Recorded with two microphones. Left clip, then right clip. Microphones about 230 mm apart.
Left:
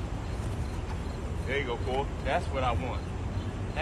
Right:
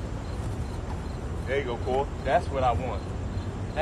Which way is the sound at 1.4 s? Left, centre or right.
Right.